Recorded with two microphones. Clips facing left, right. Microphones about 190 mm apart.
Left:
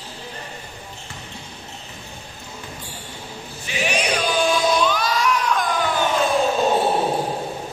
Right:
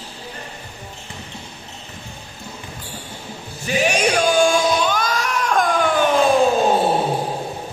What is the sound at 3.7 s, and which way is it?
Music, 45° right (ahead or behind).